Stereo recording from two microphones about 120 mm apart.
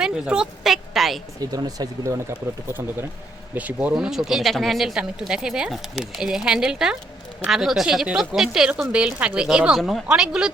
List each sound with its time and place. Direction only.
0.0 s a woman's voice: 5° right (ahead or behind)
1.4 s speech: 30° right (ahead or behind)
2.3 s speech: 15° right (ahead or behind)